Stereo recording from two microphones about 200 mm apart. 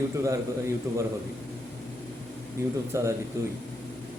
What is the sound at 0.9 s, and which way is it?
Speech, 15° right (ahead or behind).